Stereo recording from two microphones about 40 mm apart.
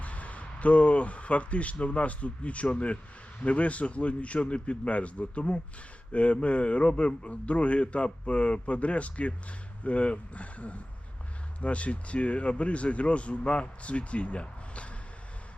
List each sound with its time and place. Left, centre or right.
0.0 s a man's voice: left